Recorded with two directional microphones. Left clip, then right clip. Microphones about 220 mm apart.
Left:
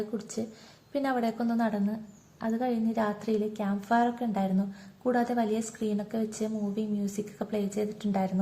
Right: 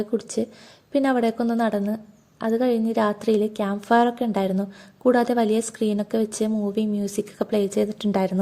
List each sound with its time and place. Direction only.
0.2 s a woman's voice: 35° right (ahead or behind)